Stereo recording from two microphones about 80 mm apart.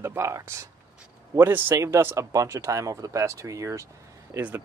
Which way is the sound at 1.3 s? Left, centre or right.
Right.